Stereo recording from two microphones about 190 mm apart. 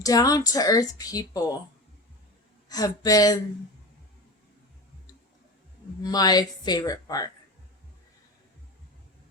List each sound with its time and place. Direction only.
0.0 s speech: 20° left (ahead or behind)
2.6 s speech: 20° left (ahead or behind)
6.0 s speech: 20° left (ahead or behind)